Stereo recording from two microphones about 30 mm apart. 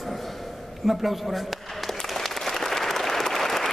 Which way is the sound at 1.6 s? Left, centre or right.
Centre.